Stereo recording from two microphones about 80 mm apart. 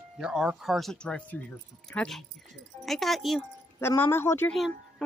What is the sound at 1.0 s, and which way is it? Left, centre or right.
Speech, centre.